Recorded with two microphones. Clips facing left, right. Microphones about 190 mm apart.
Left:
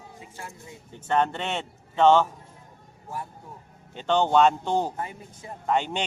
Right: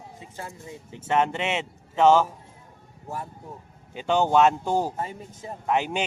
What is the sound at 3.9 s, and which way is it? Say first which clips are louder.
Speech: even; 10° right (ahead or behind).